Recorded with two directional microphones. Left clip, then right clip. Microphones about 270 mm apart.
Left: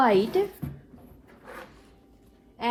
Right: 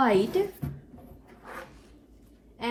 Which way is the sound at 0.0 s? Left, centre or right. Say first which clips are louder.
Left 2 dB; left.